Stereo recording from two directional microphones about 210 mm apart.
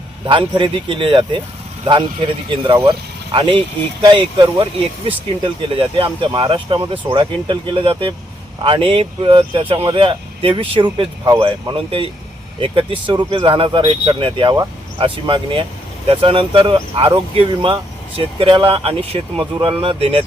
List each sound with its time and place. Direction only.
0.3 s speech: 25° right (ahead or behind)